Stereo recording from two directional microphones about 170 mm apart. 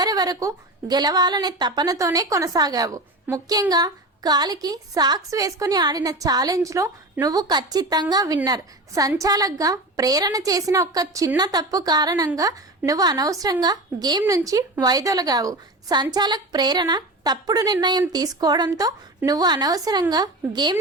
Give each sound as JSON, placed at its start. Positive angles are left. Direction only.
{"t": 0.0, "sound": "a woman's voice", "side_deg": -20}